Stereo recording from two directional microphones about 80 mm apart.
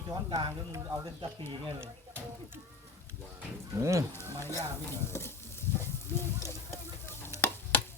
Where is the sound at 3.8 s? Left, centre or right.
Right.